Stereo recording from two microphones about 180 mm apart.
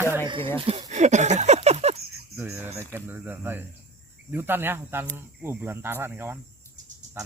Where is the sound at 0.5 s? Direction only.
30° right (ahead or behind).